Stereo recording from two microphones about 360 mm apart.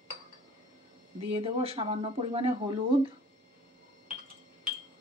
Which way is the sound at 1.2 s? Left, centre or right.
Centre.